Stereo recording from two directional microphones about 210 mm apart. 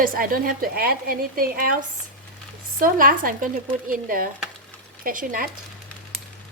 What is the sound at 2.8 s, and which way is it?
Speech, 40° right (ahead or behind).